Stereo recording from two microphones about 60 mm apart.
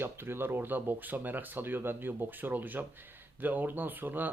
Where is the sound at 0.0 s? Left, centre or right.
Right.